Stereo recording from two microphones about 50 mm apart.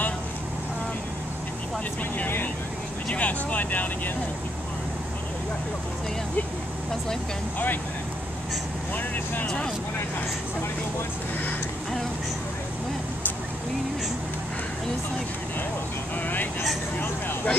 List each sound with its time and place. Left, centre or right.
2.1 s vehicle: left
3.1 s speech: left
7.5 s speech: left
8.9 s speech: left
16.2 s speech: left